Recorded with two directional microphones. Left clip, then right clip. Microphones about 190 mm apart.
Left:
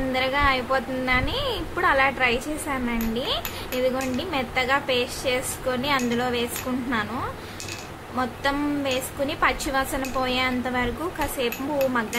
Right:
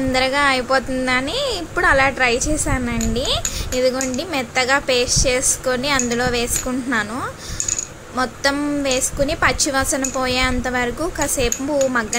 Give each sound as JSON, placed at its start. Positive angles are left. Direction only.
{"t": 0.1, "sound": "a woman's voice", "side_deg": -30}
{"t": 8.2, "sound": "a woman's voice", "side_deg": -25}